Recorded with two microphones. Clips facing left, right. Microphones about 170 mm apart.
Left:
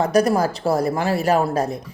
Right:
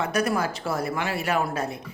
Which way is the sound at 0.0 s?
35° left (ahead or behind).